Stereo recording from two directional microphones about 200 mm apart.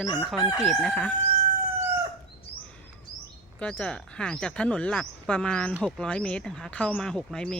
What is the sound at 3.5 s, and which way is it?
Speech, 5° left (ahead or behind).